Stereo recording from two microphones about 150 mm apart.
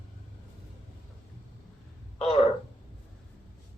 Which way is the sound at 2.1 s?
40° left (ahead or behind).